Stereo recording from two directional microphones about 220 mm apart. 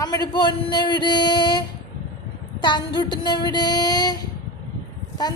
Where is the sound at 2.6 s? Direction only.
20° left (ahead or behind).